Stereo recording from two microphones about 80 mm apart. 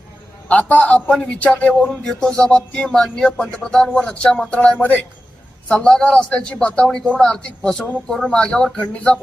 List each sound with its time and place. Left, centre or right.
0.4 s speech: centre